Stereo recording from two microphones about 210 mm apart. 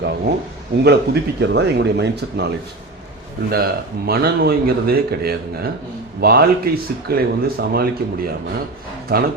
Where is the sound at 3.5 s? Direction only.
45° right (ahead or behind).